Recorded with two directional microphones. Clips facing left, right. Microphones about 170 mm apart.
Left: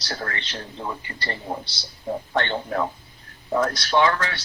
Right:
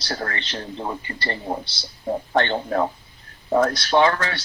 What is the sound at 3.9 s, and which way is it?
Speech, 35° right (ahead or behind).